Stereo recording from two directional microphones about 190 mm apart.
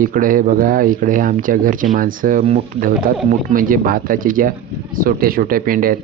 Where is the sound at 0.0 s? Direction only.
45° right (ahead or behind).